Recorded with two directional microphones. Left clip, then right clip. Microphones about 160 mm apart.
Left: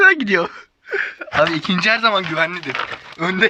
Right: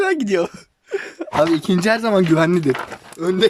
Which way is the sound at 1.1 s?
30° right (ahead or behind).